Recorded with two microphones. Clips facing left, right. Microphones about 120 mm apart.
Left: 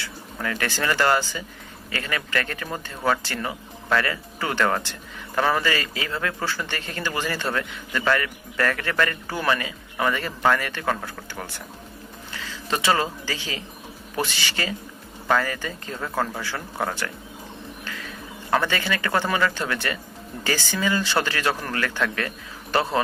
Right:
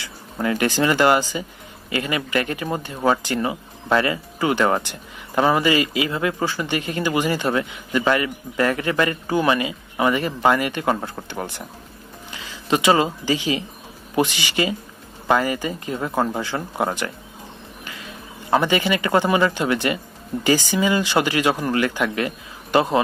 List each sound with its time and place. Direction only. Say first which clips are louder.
0.0 s speech: right 6 dB; 20° right (ahead or behind)